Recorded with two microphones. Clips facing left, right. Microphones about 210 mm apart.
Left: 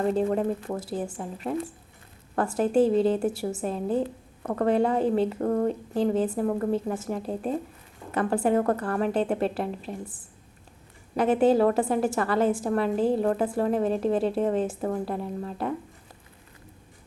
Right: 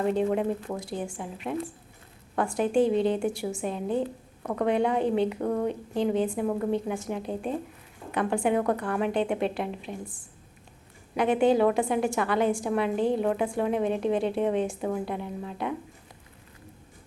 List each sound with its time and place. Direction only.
0.0 s a woman's voice: 5° right (ahead or behind)
11.2 s a woman's voice: 5° left (ahead or behind)